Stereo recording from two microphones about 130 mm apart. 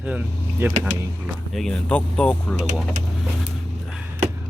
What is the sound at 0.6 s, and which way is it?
Speech, 15° right (ahead or behind).